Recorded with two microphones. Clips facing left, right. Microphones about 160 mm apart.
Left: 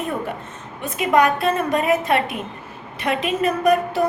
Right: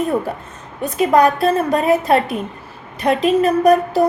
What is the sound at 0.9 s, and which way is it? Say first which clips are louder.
A woman's voice: right 4 dB; 35° right (ahead or behind).